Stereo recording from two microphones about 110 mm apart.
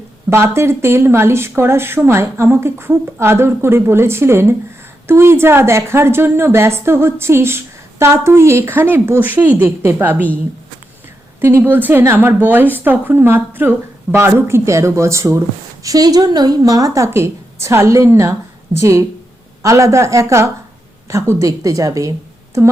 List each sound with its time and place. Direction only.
0.3 s a woman's voice: 25° right (ahead or behind)
11.3 s a woman's voice: 20° right (ahead or behind)